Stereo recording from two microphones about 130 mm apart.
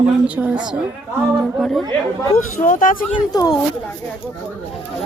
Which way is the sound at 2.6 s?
90° left.